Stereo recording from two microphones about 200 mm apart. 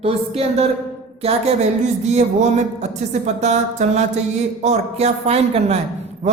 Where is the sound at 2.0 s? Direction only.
35° right (ahead or behind).